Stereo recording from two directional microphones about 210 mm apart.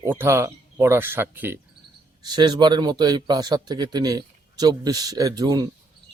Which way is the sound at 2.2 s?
20° right (ahead or behind).